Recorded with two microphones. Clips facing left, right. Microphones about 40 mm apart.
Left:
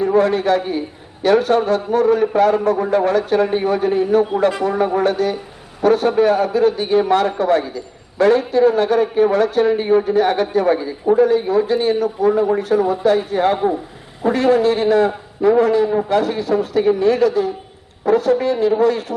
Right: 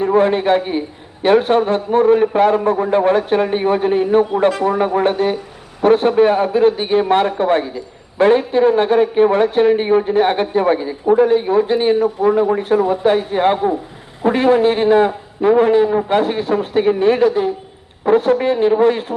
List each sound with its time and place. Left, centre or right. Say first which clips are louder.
0.0 s a man's voice: right 1 dB; right
12.5 s a man's voice: right 1 dB; right